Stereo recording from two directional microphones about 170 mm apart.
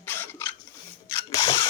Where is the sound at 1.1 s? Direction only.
20° left (ahead or behind).